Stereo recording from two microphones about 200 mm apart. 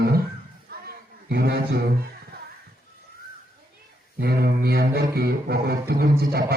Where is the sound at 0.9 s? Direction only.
55° right (ahead or behind).